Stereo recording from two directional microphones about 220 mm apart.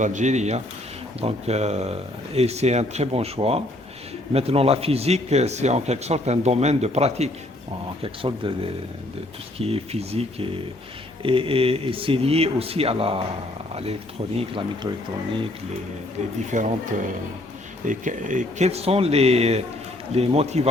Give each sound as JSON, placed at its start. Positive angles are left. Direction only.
{"t": 0.0, "sound": "speech", "side_deg": -35}
{"t": 14.3, "sound": "speech", "side_deg": -25}
{"t": 16.5, "sound": "speech", "side_deg": -35}
{"t": 17.8, "sound": "speech", "side_deg": -35}